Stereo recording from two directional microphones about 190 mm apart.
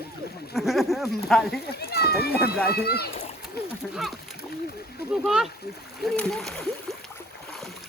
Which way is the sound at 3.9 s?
Centre (ahead or behind).